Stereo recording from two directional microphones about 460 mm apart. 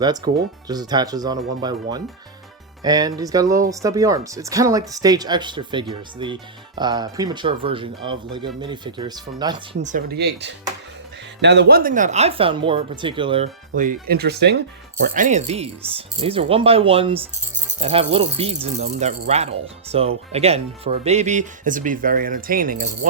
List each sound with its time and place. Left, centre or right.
0.7 s speech: centre